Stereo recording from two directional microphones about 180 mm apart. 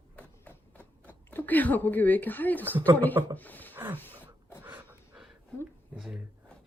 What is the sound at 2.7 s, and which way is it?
Speech, 10° right (ahead or behind).